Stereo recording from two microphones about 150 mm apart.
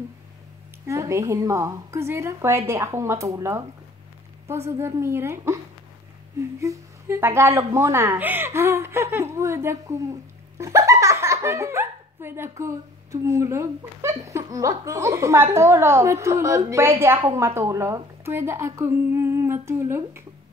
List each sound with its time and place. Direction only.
0.8 s speech: 20° right (ahead or behind)
6.6 s speech: 20° right (ahead or behind)